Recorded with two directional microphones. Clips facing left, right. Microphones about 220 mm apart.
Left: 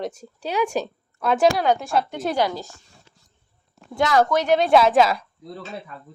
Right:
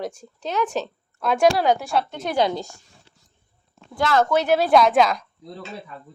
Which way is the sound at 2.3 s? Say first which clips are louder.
Right 3 dB; 20° right (ahead or behind).